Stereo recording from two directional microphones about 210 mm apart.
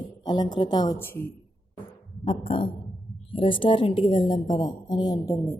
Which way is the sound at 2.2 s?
25° left (ahead or behind).